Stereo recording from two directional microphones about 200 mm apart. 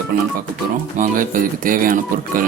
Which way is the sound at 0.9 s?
40° right (ahead or behind).